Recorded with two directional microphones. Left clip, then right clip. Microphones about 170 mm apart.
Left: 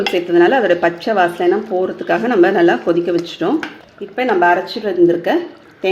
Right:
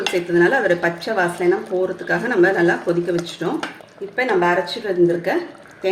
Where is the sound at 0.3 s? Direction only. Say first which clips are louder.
Left 4 dB; 50° left (ahead or behind).